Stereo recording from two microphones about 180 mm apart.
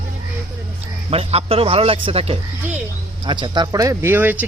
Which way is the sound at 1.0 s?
35° right (ahead or behind).